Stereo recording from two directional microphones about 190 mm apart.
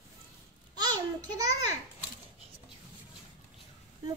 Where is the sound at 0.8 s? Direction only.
20° right (ahead or behind).